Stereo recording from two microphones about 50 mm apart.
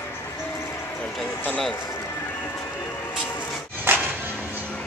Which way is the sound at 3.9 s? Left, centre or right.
Right.